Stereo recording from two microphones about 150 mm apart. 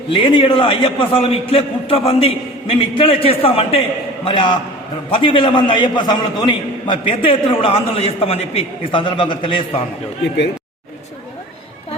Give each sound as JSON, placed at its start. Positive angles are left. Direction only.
{"t": 0.1, "sound": "a man's voice", "side_deg": 35}